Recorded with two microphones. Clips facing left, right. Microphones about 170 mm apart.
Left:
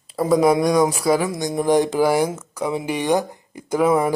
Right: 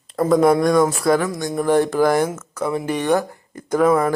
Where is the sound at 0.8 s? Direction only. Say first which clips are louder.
Right 1 dB; 5° left (ahead or behind).